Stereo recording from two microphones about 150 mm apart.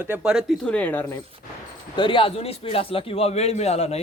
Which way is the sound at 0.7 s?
10° left (ahead or behind).